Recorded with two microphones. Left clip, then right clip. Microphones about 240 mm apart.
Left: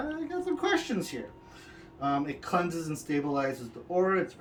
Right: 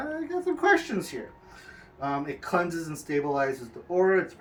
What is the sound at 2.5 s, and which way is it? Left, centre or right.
Speech, centre.